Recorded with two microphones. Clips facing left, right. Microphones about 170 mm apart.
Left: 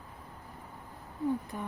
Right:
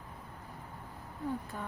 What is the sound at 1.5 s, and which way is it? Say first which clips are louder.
Speech: left 3 dB; 10° left (ahead or behind).